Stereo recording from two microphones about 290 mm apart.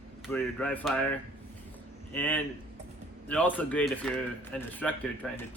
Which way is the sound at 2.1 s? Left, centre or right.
Centre.